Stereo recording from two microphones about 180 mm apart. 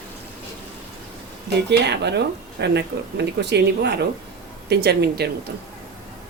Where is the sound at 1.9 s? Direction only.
70° right (ahead or behind).